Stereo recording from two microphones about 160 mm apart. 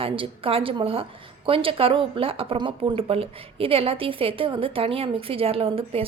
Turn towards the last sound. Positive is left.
turn(degrees=-35)  # may be behind; listen again after turning